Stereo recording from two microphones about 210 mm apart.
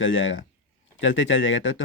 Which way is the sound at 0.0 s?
65° left (ahead or behind).